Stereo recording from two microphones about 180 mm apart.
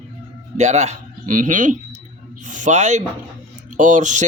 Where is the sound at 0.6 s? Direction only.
40° right (ahead or behind).